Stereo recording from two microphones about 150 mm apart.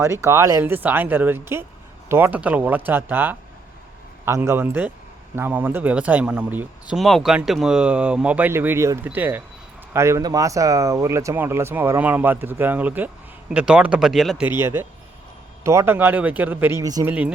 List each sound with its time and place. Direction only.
0.0 s speech: 20° right (ahead or behind); by 14.4 s centre (ahead or behind)
14.6 s speech: 15° right (ahead or behind)